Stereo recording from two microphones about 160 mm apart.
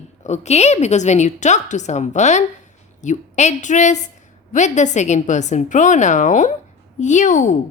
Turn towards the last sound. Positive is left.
turn(degrees=50)  # may be behind; listen again after turning